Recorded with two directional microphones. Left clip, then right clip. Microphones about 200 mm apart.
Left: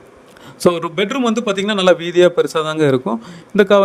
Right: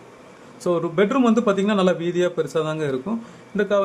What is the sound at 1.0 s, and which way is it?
A man's voice, 40° left (ahead or behind).